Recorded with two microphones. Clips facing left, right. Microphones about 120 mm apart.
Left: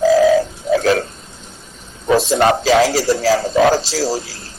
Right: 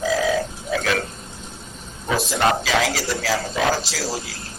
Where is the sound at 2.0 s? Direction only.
35° left (ahead or behind).